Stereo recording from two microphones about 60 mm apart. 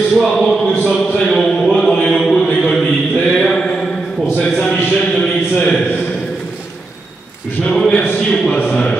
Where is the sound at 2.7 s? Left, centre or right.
Centre.